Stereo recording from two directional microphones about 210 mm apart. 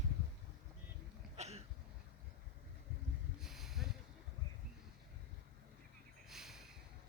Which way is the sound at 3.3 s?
Centre (ahead or behind).